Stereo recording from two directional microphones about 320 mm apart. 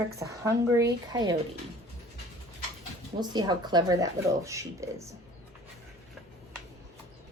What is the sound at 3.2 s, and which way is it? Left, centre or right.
A woman's voice, centre.